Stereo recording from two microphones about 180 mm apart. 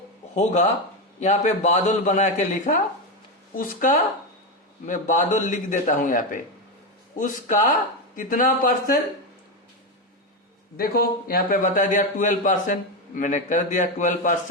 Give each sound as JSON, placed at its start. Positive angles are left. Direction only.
{"t": 0.3, "sound": "a man's voice", "side_deg": 40}
{"t": 10.8, "sound": "a man's voice", "side_deg": 55}